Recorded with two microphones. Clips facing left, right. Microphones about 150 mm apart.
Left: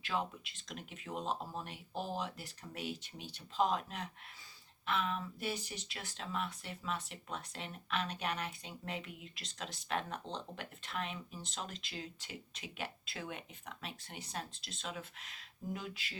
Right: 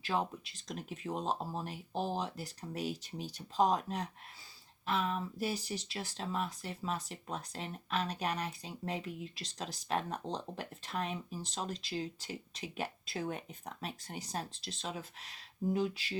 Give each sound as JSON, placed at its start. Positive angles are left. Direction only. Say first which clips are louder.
{"t": 0.0, "sound": "speech", "louder": "right 3 dB", "side_deg": -35}